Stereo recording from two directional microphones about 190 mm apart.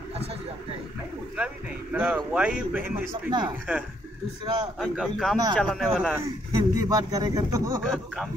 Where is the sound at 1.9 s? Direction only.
5° right (ahead or behind).